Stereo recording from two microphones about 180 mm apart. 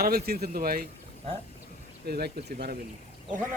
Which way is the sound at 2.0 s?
60° right (ahead or behind).